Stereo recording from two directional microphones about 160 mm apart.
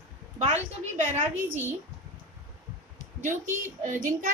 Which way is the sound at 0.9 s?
50° right (ahead or behind).